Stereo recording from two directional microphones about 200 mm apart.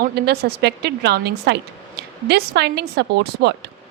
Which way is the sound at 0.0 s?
55° right (ahead or behind).